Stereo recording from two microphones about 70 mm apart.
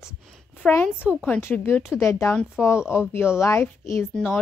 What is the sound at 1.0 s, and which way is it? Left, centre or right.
Speech, centre.